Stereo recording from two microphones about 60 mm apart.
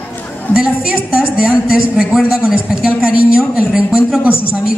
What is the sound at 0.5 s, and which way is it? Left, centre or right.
A woman's voice, centre.